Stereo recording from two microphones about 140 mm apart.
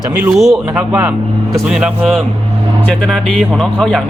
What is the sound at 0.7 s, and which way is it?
Speech, 15° right (ahead or behind).